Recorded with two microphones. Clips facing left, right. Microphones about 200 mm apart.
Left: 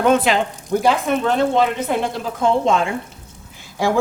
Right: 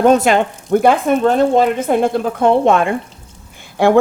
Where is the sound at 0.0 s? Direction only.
45° right (ahead or behind).